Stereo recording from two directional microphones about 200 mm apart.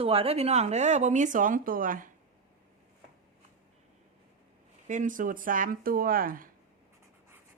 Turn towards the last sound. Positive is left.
turn(degrees=-45)  # may be behind; listen again after turning